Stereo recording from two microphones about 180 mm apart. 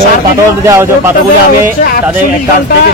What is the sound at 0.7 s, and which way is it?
Speech, 15° right (ahead or behind).